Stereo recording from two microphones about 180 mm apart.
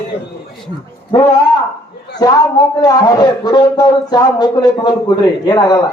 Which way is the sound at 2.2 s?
20° left (ahead or behind).